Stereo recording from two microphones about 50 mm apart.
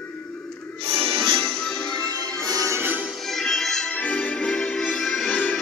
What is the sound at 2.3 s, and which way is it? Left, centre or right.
Music, right.